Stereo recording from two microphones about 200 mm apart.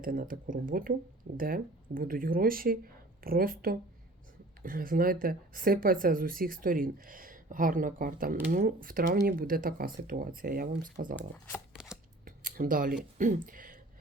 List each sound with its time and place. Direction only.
0.0 s speech: 45° right (ahead or behind)
11.2 s speech: 10° left (ahead or behind)
12.2 s a sound: 45° right (ahead or behind)